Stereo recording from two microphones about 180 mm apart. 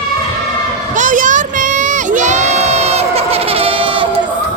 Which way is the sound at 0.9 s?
45° right (ahead or behind).